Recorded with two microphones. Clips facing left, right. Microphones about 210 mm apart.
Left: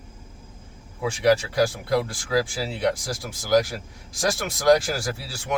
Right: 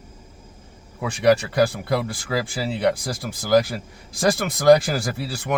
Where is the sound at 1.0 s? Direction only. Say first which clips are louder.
Right 2 dB; 60° right (ahead or behind).